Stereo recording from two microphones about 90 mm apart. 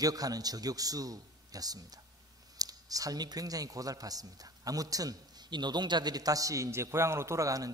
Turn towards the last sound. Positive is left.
turn(degrees=-40)  # may be behind; listen again after turning